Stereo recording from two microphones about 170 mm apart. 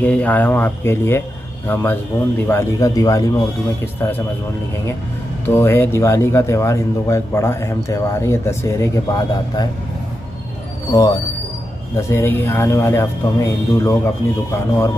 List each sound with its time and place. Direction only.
0.0 s speech: 10° left (ahead or behind)
5.4 s speech: 15° left (ahead or behind)
10.9 s speech: 20° left (ahead or behind)